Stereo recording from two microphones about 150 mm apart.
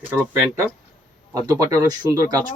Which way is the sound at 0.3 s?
15° right (ahead or behind).